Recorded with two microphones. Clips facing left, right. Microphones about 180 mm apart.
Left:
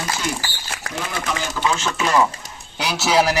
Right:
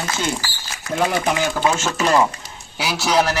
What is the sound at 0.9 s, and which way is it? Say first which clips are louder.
Speech: right 7 dB; 55° right (ahead or behind).